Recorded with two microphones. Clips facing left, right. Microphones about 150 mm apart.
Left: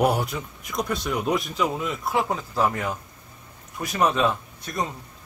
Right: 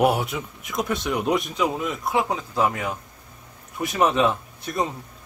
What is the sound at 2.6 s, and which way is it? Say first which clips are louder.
Speech: even; 10° right (ahead or behind).